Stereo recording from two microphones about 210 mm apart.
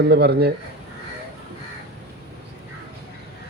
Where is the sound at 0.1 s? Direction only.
50° right (ahead or behind).